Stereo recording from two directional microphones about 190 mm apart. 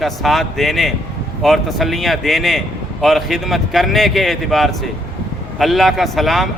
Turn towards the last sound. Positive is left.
turn(degrees=0)  # may be behind; listen again after turning